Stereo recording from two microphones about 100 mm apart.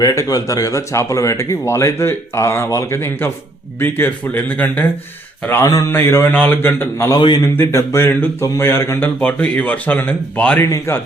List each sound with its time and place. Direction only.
0.0 s speech: 35° left (ahead or behind); by 4.9 s 20° left (ahead or behind)
5.9 s speech: 25° left (ahead or behind)
7.2 s a man's voice: 50° left (ahead or behind)
7.4 s speech: 25° left (ahead or behind)
10.6 s speech: 25° left (ahead or behind)